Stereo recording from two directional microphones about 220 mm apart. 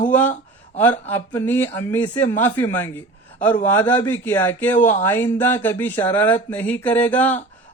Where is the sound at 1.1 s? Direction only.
10° left (ahead or behind).